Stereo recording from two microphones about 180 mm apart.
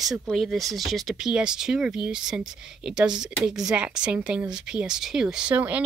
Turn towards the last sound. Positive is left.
turn(degrees=-10)  # may be behind; listen again after turning